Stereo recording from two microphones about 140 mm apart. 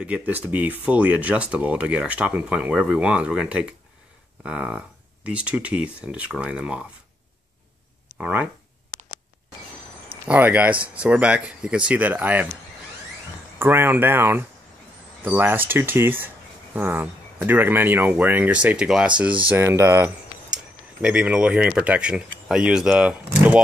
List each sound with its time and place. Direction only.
0.0 s speech: 10° right (ahead or behind)
8.2 s speech: 10° right (ahead or behind)
10.2 s speech: 10° right (ahead or behind)
13.6 s speech: 15° right (ahead or behind)
19.5 s speech: 20° right (ahead or behind)
20.5 s speech: 5° right (ahead or behind)